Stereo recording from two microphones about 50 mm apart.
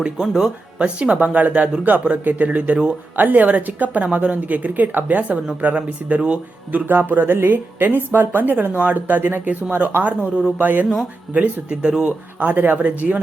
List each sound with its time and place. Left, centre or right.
0.0 s a woman's voice: centre; by 10.8 s right
11.3 s speech: right
12.4 s a woman's voice: right